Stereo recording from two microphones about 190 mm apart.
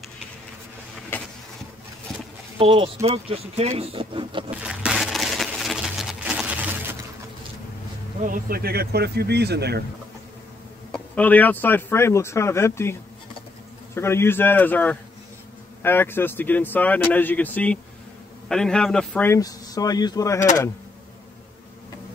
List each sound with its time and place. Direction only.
1.1 s vehicle: 10° left (ahead or behind)
2.6 s speech: 30° right (ahead or behind)
4.6 s a sound: 5° right (ahead or behind)
8.2 s speech: 45° right (ahead or behind)
10.9 s speech: 10° left (ahead or behind)
13.9 s speech: 15° left (ahead or behind)